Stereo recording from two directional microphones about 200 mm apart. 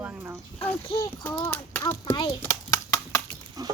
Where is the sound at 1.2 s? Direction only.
10° left (ahead or behind).